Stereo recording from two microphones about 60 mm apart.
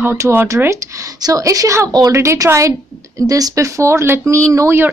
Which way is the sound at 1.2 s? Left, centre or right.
Right.